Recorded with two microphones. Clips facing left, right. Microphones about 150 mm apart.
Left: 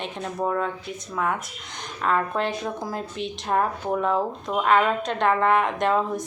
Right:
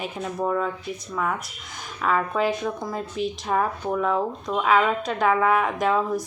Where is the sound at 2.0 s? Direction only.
Centre (ahead or behind).